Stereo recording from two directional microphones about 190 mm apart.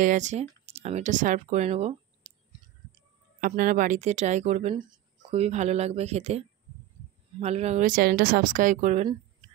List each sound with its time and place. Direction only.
0.0 s speech: 40° right (ahead or behind)
3.3 s speech: 45° right (ahead or behind)